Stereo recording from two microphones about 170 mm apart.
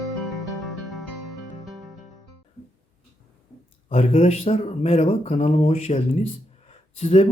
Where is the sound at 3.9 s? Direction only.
35° left (ahead or behind).